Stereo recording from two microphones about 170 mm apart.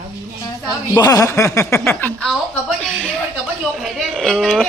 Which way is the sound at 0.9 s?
20° left (ahead or behind).